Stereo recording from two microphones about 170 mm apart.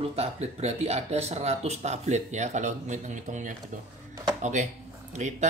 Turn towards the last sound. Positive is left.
turn(degrees=-45)  # may be behind; listen again after turning